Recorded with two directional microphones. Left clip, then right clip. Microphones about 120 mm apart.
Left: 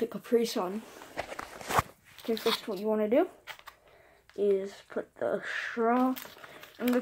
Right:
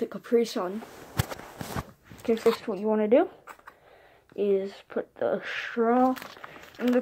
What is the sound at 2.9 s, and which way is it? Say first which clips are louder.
Speech: right 4 dB; 40° right (ahead or behind).